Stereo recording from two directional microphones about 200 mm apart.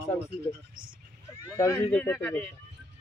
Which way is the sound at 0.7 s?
45° right (ahead or behind).